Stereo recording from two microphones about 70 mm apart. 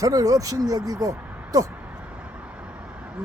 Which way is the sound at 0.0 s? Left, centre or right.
Right.